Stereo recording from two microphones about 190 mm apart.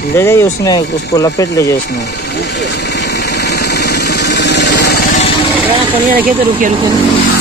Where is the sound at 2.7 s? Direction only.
60° left (ahead or behind).